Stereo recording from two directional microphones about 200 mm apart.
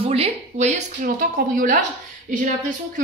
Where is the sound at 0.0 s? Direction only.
30° right (ahead or behind).